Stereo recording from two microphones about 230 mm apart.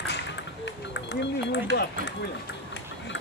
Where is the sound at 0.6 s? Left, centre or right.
Left.